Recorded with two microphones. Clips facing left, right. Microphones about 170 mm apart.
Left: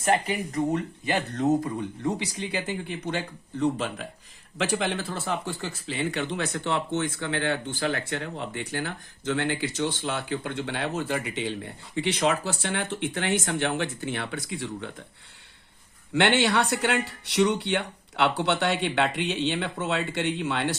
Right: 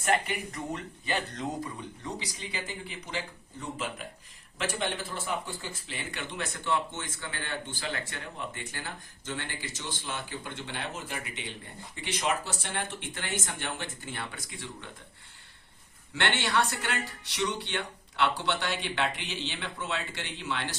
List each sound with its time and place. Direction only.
0.0 s speech: 40° left (ahead or behind)
2.2 s speech: 60° left (ahead or behind)
16.1 s speech: 60° left (ahead or behind)